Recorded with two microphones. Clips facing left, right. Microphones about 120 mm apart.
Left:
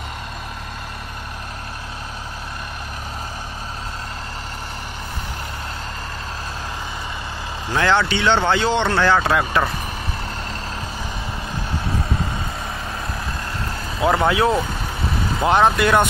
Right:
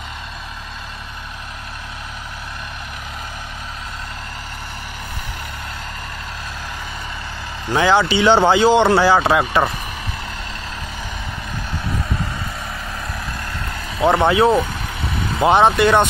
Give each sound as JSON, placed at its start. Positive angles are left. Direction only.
{"t": 7.7, "sound": "speech", "side_deg": -5}
{"t": 13.9, "sound": "speech", "side_deg": 0}